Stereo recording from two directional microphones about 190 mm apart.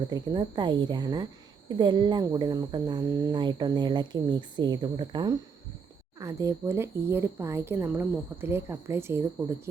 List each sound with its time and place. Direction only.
0.1 s speech: 20° right (ahead or behind)